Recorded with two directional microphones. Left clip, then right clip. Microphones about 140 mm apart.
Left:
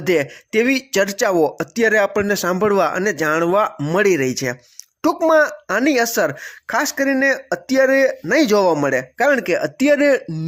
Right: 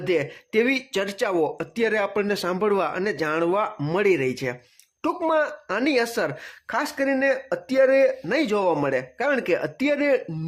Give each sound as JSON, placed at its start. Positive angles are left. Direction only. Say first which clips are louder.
{"t": 0.0, "sound": "speech", "louder": "left 6 dB", "side_deg": 40}
{"t": 0.5, "sound": "speech", "louder": "left 5 dB", "side_deg": 30}
{"t": 8.7, "sound": "a man's voice", "louder": "left 5 dB", "side_deg": 25}